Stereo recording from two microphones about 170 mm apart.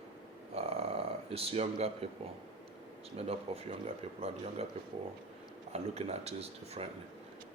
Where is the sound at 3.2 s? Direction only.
35° right (ahead or behind).